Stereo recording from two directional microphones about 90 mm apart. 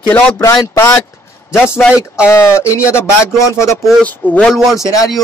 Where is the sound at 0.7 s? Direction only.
30° left (ahead or behind).